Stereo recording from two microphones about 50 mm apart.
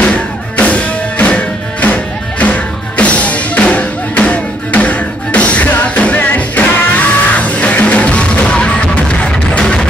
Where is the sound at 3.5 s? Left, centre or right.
Left.